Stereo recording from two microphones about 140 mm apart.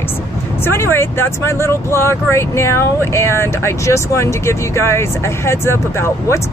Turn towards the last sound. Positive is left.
turn(degrees=20)  # may be behind; listen again after turning